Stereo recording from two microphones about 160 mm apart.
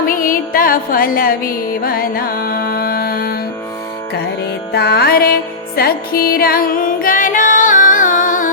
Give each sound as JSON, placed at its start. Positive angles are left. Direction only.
{"t": 0.0, "sound": "music", "side_deg": 60}
{"t": 4.7, "sound": "music", "side_deg": 90}